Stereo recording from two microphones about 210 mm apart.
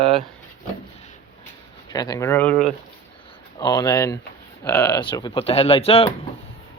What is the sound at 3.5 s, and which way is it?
Speech, 15° left (ahead or behind).